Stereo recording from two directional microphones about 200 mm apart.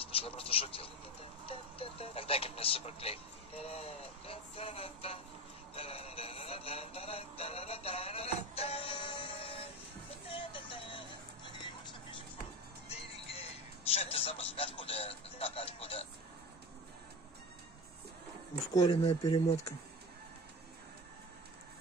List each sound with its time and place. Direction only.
0.0 s a sound: 30° left (ahead or behind)
1.4 s speech: 30° left (ahead or behind)
5.8 s music: 30° left (ahead or behind)
10.2 s vehicle: 25° left (ahead or behind)
12.8 s a man's voice: 30° left (ahead or behind)
18.7 s speech: 20° left (ahead or behind)